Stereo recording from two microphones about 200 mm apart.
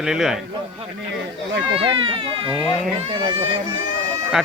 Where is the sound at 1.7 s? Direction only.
30° right (ahead or behind).